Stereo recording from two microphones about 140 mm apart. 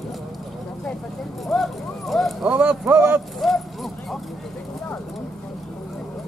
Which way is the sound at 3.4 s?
Centre (ahead or behind).